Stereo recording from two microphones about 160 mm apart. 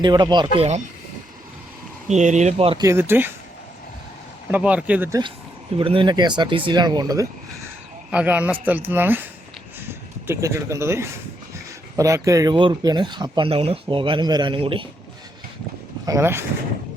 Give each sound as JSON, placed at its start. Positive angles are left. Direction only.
{"t": 0.0, "sound": "speech", "side_deg": -30}
{"t": 2.0, "sound": "speech", "side_deg": -45}
{"t": 2.8, "sound": "a man's voice", "side_deg": -15}
{"t": 4.5, "sound": "a man's voice", "side_deg": -10}
{"t": 5.7, "sound": "speech", "side_deg": -35}
{"t": 8.1, "sound": "a man's voice", "side_deg": -10}
{"t": 10.2, "sound": "a man's voice", "side_deg": -20}
{"t": 16.0, "sound": "a man's voice", "side_deg": -15}